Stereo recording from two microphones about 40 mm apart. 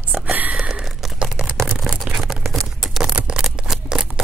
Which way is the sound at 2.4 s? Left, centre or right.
Centre.